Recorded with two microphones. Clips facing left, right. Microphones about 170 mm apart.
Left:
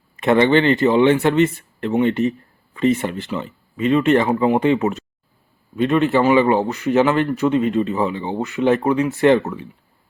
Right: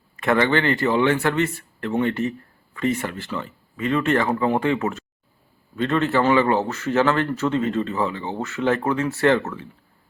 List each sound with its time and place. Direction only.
0.2 s a man's voice: 20° left (ahead or behind)